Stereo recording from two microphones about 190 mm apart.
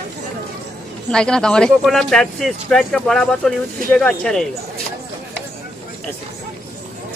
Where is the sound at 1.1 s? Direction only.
5° left (ahead or behind).